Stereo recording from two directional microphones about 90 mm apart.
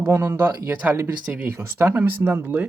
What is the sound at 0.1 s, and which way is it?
Speech, 30° right (ahead or behind).